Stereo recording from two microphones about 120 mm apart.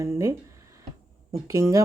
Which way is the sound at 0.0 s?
25° right (ahead or behind).